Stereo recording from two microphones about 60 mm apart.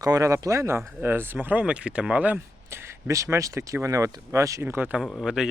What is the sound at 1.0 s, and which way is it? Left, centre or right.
Speech, right.